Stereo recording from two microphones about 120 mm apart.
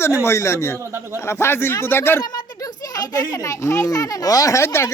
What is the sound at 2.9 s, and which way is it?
A child's voice, 30° left (ahead or behind).